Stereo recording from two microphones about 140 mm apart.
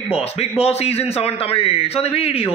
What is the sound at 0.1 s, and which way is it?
A man's voice, 50° left (ahead or behind).